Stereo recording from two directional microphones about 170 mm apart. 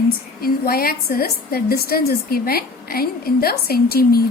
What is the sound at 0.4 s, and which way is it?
A woman's voice, 60° left (ahead or behind).